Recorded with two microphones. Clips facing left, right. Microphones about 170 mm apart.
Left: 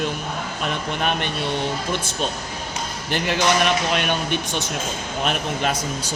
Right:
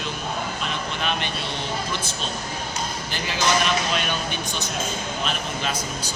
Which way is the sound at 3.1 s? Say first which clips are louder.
Left 4 dB; 60° left (ahead or behind).